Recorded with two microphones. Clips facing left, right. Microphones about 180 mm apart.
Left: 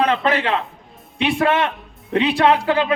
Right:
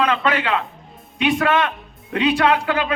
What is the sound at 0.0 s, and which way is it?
A man's voice, 35° left (ahead or behind).